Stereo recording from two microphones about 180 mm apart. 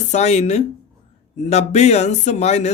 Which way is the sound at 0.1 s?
40° left (ahead or behind).